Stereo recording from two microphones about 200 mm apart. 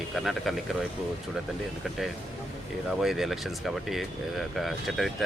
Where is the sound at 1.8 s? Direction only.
Centre (ahead or behind).